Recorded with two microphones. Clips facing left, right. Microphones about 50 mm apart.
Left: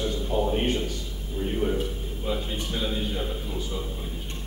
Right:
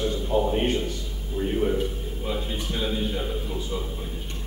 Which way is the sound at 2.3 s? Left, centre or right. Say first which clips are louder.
Even; centre.